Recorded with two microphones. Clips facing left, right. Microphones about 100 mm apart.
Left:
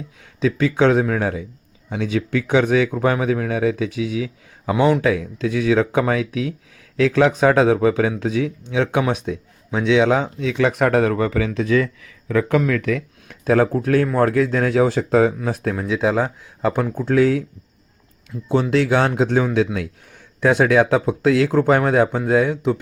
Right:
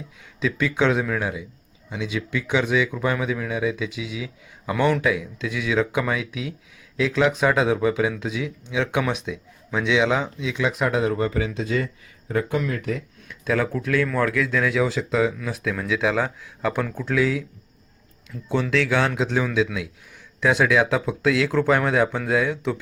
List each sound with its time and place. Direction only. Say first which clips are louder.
0.4 s speech: left 5 dB; 35° left (ahead or behind)
4.7 s a man's voice: left 4 dB; 20° left (ahead or behind)
5.0 s speech: left 4 dB; 40° left (ahead or behind)
10.4 s speech: left 6 dB; 55° left (ahead or behind); by 13.0 s 90° left
13.2 s speech: left 7 dB; 45° left (ahead or behind)
15.7 s speech: left 2 dB; 30° left (ahead or behind)
18.3 s speech: left 5 dB; 10° left (ahead or behind)
18.7 s speech: left 3 dB; 35° left (ahead or behind)